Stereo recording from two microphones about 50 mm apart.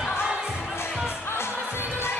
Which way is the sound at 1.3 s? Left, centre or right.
Left.